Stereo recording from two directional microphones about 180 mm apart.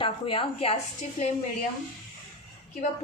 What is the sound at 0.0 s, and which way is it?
Speech, 30° left (ahead or behind).